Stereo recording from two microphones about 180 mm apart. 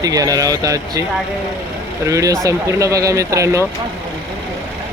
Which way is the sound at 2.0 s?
15° right (ahead or behind).